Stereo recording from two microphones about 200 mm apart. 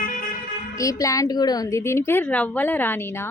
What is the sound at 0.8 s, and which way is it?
A woman's voice, 15° left (ahead or behind).